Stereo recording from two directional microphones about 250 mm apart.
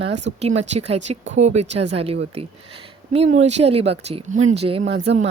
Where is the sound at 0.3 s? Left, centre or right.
Right.